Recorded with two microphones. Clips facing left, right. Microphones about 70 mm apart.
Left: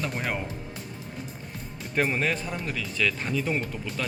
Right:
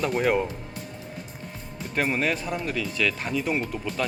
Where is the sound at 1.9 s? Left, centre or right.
Centre.